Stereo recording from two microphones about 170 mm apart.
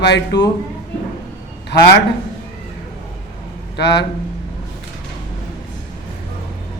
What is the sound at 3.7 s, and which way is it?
Speech, 75° left (ahead or behind).